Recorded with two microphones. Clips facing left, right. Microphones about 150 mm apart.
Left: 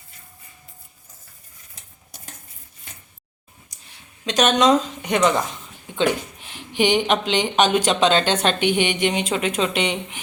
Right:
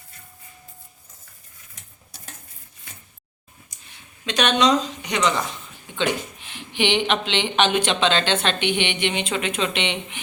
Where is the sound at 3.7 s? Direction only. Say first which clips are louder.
Even; 35° left (ahead or behind).